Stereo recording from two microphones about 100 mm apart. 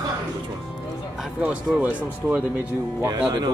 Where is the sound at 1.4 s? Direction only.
15° right (ahead or behind).